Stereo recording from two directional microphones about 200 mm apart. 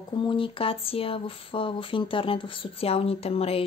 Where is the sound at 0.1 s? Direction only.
25° left (ahead or behind).